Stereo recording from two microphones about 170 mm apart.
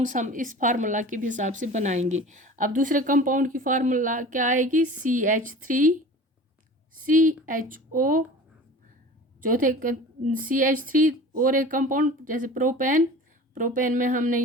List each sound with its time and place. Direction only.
0.0 s a woman's voice: 50° right (ahead or behind)
7.0 s a woman's voice: 55° right (ahead or behind)
9.4 s a woman's voice: 55° right (ahead or behind)